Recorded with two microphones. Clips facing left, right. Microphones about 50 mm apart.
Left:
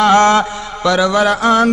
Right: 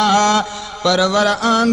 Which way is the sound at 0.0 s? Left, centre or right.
Left.